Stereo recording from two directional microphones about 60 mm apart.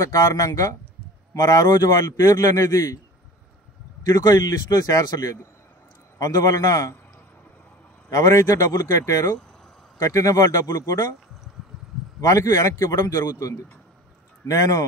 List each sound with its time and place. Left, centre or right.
0.0 s a man's voice: left
4.0 s a man's voice: left
8.1 s a man's voice: left
12.2 s a man's voice: left
14.5 s a man's voice: left